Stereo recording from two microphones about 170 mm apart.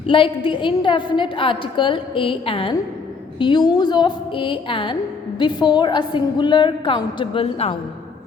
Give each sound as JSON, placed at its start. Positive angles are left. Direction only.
{"t": 0.1, "sound": "a woman's voice", "side_deg": 30}